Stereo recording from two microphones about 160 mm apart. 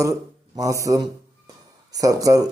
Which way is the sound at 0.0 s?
20° right (ahead or behind).